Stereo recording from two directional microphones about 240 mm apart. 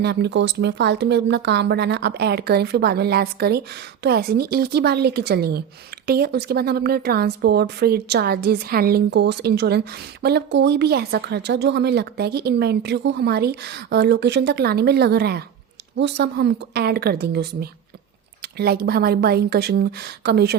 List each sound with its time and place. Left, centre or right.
0.0 s speech: right